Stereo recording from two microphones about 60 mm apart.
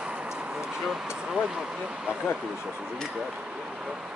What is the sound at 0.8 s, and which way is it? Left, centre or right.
Speech, centre.